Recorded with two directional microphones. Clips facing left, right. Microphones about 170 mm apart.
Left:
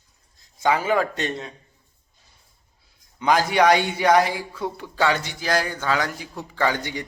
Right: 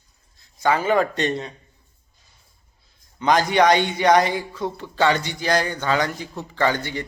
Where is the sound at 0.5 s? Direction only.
15° left (ahead or behind).